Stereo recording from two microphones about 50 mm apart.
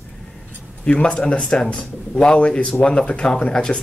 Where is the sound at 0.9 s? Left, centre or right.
Left.